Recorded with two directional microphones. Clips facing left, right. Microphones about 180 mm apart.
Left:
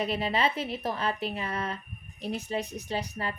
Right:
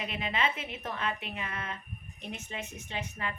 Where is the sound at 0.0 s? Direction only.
35° left (ahead or behind).